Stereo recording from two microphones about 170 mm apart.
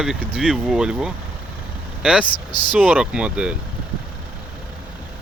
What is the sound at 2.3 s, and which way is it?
Speech, 25° left (ahead or behind).